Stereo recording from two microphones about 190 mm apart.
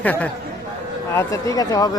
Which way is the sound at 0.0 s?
10° left (ahead or behind).